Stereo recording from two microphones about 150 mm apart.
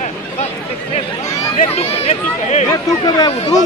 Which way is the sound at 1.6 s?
40° left (ahead or behind).